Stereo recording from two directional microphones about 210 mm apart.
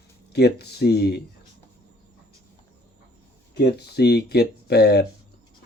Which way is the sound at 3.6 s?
50° left (ahead or behind).